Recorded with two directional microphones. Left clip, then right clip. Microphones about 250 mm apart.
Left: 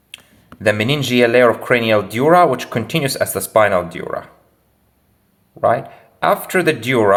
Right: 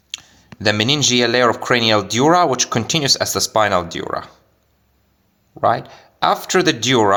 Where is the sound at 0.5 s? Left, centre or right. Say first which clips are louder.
Even; right.